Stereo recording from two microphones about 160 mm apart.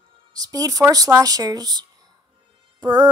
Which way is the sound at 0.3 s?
25° right (ahead or behind).